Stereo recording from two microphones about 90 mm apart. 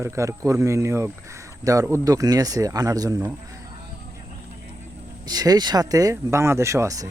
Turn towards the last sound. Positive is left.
turn(degrees=-40)  # may be behind; listen again after turning